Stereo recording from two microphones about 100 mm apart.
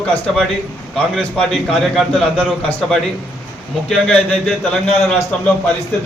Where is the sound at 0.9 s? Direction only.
5° left (ahead or behind).